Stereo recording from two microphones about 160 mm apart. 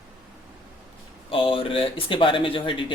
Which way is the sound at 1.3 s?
35° left (ahead or behind).